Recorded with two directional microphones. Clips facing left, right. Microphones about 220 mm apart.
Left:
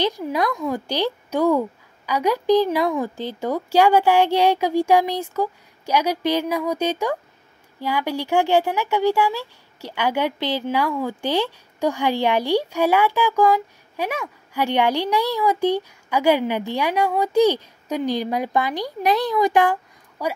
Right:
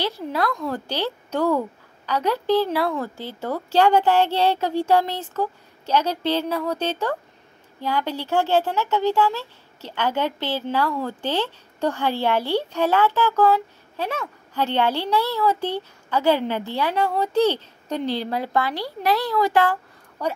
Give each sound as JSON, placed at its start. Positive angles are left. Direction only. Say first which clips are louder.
{"t": 0.0, "sound": "a woman's voice", "louder": "left 3 dB", "side_deg": 15}